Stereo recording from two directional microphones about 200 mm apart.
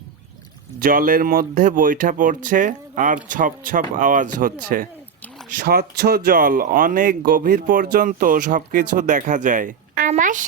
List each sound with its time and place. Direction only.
0.8 s speech: 45° right (ahead or behind)